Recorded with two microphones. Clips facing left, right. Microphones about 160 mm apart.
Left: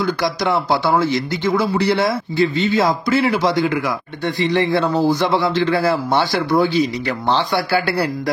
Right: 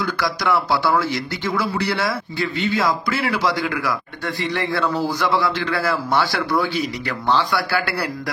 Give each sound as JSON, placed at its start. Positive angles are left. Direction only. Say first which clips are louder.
{"t": 0.0, "sound": "speech", "louder": "left 4 dB", "side_deg": 20}